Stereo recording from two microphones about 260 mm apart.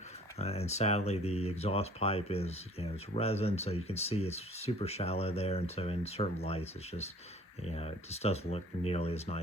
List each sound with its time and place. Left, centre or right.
0.3 s speech: left